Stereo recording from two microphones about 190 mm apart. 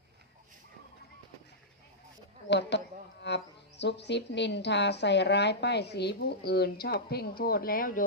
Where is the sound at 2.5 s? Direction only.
65° left (ahead or behind).